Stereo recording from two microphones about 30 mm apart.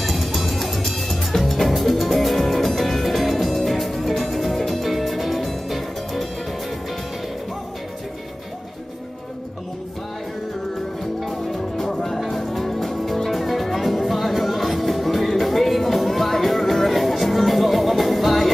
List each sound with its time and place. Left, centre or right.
0.0 s music: centre
11.1 s music: centre